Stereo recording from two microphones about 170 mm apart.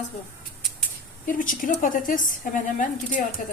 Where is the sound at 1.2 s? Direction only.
50° left (ahead or behind).